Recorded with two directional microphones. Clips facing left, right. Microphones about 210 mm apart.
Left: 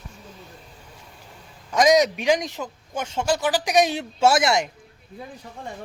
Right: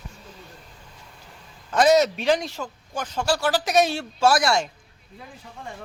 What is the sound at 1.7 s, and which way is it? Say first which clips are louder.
Speech: even; 10° left (ahead or behind).